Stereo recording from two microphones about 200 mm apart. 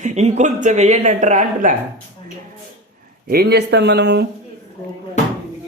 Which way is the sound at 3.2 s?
50° right (ahead or behind).